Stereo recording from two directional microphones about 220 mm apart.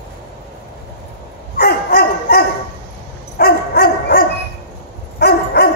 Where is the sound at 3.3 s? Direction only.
45° left (ahead or behind).